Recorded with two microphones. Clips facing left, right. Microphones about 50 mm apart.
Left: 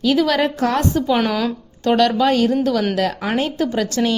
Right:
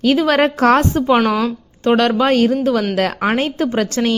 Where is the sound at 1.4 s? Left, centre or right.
Centre.